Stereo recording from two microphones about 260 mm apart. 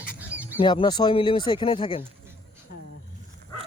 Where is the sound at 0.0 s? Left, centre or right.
Centre.